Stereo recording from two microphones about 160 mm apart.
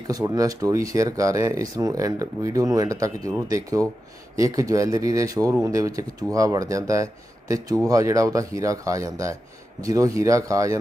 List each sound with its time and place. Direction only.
0.1 s speech: 20° right (ahead or behind)